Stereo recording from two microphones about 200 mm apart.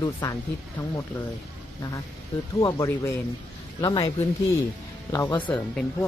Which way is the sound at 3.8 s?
20° left (ahead or behind).